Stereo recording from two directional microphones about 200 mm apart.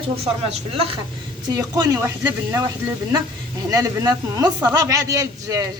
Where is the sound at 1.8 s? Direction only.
15° right (ahead or behind).